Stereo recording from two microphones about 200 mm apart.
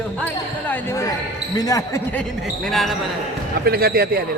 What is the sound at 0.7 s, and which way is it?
Speech, 10° left (ahead or behind).